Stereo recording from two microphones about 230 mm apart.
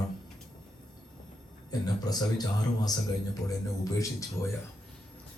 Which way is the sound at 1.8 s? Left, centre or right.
Centre.